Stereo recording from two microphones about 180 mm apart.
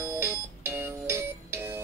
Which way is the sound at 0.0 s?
15° right (ahead or behind).